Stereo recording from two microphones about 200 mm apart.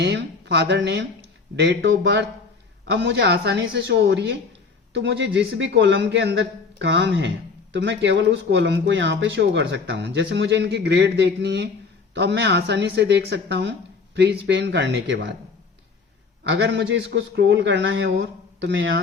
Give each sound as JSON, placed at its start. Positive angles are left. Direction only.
{"t": 0.0, "sound": "a man's voice", "side_deg": -60}
{"t": 16.4, "sound": "a man's voice", "side_deg": -65}